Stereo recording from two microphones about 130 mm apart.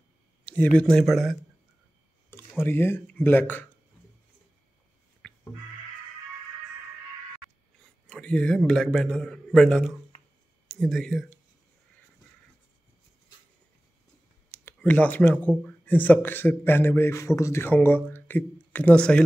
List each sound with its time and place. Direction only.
0.5 s a man's voice: 10° left (ahead or behind)
2.3 s speech: 15° left (ahead or behind)
5.2 s a sound: 10° left (ahead or behind)
8.1 s a man's voice: 10° left (ahead or behind)
14.6 s a man's voice: 15° left (ahead or behind)